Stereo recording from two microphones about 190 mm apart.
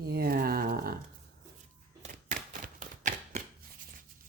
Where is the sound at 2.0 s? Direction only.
45° right (ahead or behind).